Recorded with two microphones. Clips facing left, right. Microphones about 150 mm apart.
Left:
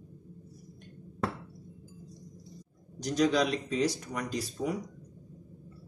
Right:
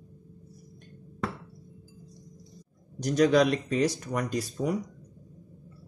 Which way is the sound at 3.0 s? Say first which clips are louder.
Right 5 dB; 55° right (ahead or behind).